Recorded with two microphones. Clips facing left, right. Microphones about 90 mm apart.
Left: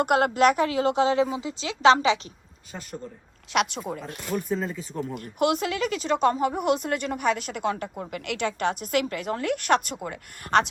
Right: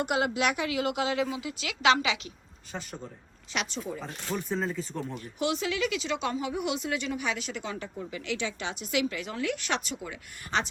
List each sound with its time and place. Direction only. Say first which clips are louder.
0.0 s a woman's voice: left 7 dB; 50° left (ahead or behind); by 2.3 s 35° left (ahead or behind)
3.5 s speech: left 8 dB; 55° left (ahead or behind)
4.3 s speech: left 3 dB; 5° left (ahead or behind)
5.1 s speech: left 7 dB; 50° left (ahead or behind)